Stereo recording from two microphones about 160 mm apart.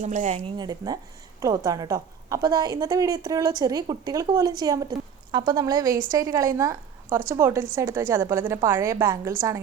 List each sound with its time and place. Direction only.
0.0 s a woman's voice: 50° right (ahead or behind)
0.5 s a woman's voice: 25° right (ahead or behind)